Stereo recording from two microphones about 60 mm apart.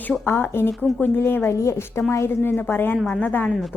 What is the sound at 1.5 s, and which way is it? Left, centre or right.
A woman's voice, left.